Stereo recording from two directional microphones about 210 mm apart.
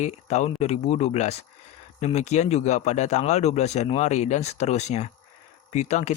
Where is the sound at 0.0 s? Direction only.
30° left (ahead or behind).